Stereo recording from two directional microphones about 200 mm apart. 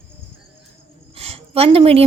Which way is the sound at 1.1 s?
30° right (ahead or behind).